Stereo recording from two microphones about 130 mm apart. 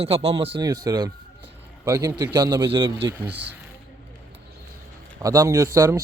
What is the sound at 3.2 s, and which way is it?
Speech, 10° right (ahead or behind).